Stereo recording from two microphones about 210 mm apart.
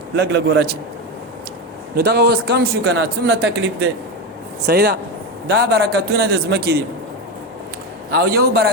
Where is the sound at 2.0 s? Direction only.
50° right (ahead or behind).